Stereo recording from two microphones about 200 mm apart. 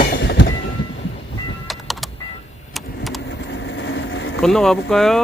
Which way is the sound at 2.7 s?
Centre (ahead or behind).